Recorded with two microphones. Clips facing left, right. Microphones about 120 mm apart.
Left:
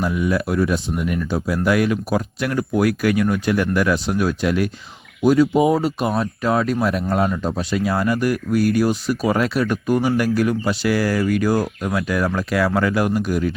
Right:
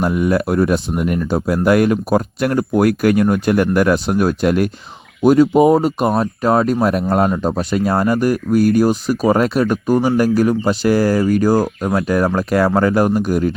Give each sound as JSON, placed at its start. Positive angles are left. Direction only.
{"t": 0.0, "sound": "speech", "side_deg": -50}